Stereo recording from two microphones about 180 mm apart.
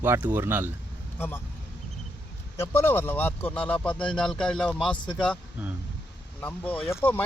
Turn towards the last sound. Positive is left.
turn(degrees=10)  # may be behind; listen again after turning